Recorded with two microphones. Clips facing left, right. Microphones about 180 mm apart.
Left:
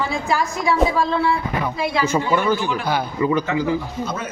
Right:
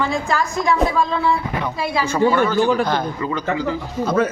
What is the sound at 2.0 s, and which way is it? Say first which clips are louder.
A woman's voice: right 4 dB; 15° left (ahead or behind).